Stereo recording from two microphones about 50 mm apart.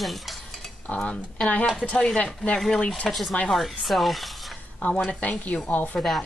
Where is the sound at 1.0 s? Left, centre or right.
Centre.